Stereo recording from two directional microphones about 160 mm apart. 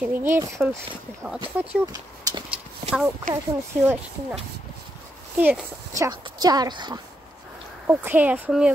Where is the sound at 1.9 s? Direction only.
25° right (ahead or behind).